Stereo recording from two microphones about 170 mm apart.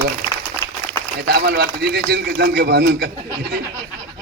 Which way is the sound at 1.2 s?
75° right (ahead or behind).